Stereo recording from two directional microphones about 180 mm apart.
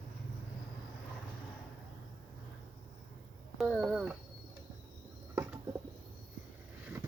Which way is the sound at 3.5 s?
Centre (ahead or behind).